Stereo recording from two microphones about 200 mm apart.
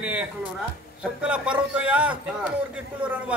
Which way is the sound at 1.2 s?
5° right (ahead or behind).